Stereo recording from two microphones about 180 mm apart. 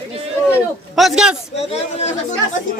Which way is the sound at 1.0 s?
Centre (ahead or behind).